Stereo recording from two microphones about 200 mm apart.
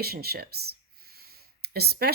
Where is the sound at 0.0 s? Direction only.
50° right (ahead or behind).